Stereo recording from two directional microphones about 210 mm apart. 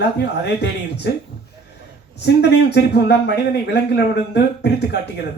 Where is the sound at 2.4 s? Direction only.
50° left (ahead or behind).